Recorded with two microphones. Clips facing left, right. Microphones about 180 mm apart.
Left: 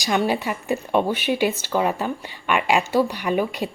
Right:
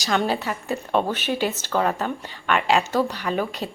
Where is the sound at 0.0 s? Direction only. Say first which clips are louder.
Left 2 dB; 10° left (ahead or behind).